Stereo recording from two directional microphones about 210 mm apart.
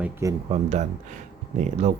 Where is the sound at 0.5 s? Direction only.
35° right (ahead or behind).